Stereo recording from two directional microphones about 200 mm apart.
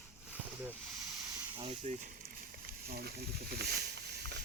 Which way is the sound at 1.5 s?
30° right (ahead or behind).